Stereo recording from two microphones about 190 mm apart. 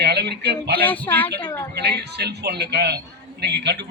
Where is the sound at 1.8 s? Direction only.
60° right (ahead or behind).